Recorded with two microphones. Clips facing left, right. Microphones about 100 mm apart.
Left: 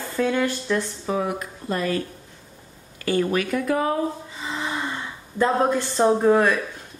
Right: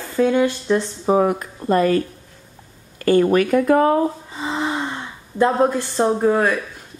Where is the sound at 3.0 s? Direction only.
45° right (ahead or behind).